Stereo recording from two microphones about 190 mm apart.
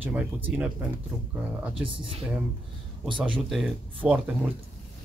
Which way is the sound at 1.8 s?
30° right (ahead or behind).